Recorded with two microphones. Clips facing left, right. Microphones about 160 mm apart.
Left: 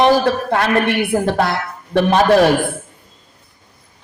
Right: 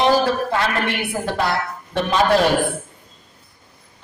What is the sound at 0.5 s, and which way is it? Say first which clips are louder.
Speech: left 5 dB; 55° left (ahead or behind).